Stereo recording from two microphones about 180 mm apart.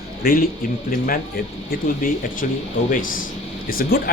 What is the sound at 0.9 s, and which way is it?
A man's voice, 50° left (ahead or behind).